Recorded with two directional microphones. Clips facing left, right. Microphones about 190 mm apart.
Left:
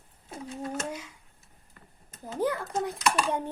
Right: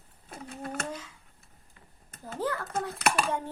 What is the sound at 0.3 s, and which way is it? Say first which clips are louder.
Bird: left 3 dB; 60° right (ahead or behind).